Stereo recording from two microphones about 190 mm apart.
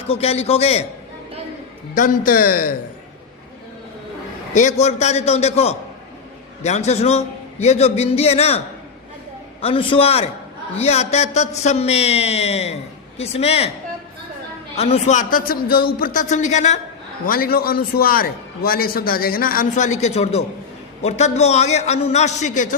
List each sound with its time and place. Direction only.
0.1 s a man's voice: 35° left (ahead or behind)
2.0 s a man's voice: 45° left (ahead or behind)
4.5 s a man's voice: 35° left (ahead or behind)
14.8 s a man's voice: 35° left (ahead or behind)
17.2 s a man's voice: 50° left (ahead or behind)